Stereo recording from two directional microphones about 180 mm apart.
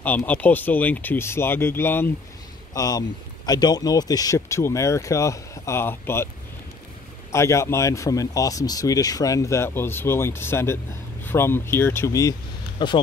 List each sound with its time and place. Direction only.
0.0 s speech: 10° left (ahead or behind)
7.3 s speech: 15° left (ahead or behind)